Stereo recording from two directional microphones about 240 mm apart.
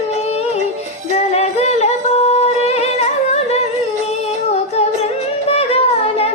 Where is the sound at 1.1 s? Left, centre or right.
Left.